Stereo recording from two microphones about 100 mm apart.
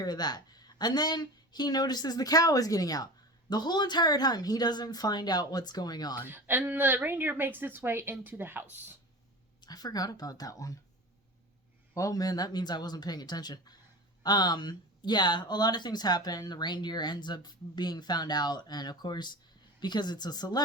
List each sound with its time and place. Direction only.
0.0 s speech: 45° left (ahead or behind)
6.2 s speech: 20° right (ahead or behind)
9.6 s speech: 40° left (ahead or behind)
11.9 s speech: 35° left (ahead or behind)